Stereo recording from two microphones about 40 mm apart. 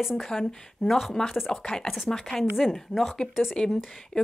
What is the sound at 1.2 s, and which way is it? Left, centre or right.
A woman's voice, centre.